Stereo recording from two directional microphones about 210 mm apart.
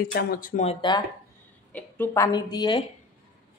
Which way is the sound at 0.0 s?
45° left (ahead or behind).